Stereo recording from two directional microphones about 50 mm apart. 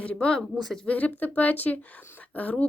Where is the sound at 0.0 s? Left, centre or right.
Left.